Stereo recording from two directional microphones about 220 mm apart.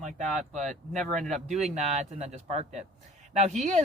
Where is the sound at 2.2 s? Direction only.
30° right (ahead or behind).